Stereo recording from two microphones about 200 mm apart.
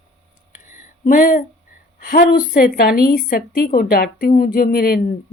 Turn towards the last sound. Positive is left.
turn(degrees=50)  # may be behind; listen again after turning